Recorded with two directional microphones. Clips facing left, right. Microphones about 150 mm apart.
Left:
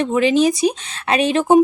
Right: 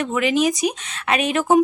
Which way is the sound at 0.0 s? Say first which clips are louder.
Left 4 dB; 30° left (ahead or behind).